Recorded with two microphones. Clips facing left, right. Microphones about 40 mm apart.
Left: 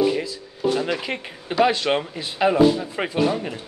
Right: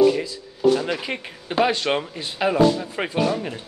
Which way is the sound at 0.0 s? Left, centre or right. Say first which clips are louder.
Right 4 dB; centre.